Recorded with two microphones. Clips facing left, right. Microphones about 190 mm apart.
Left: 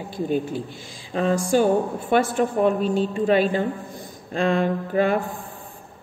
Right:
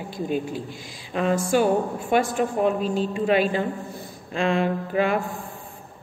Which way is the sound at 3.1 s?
40° left (ahead or behind).